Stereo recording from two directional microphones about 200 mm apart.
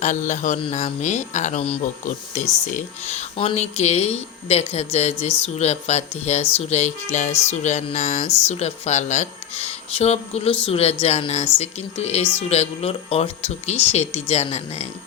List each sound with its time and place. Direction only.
0.0 s speech: 40° left (ahead or behind)